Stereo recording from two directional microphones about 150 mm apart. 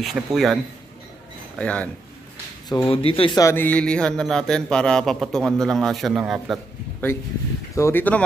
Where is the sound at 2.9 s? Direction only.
40° left (ahead or behind).